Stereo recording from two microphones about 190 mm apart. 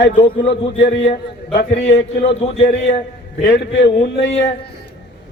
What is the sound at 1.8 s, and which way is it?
A man's voice, 35° left (ahead or behind).